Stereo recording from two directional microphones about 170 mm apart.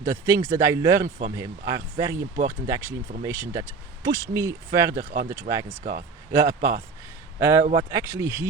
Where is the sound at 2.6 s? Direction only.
15° right (ahead or behind).